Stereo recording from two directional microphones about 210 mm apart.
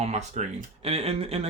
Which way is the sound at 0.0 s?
30° right (ahead or behind).